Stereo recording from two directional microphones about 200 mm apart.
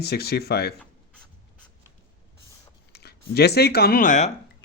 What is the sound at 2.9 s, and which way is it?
Speech, 55° left (ahead or behind).